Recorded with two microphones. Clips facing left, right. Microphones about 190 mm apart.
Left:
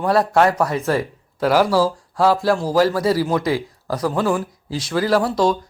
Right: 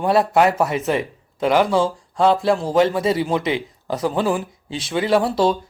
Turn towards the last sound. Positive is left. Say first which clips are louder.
# even
turn(degrees=0)  # may be behind; listen again after turning